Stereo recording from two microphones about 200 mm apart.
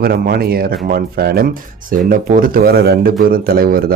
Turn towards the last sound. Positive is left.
turn(degrees=-50)  # may be behind; listen again after turning